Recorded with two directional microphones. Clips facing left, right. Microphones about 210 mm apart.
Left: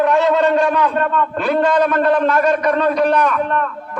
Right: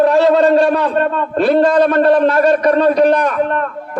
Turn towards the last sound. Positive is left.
turn(degrees=-35)  # may be behind; listen again after turning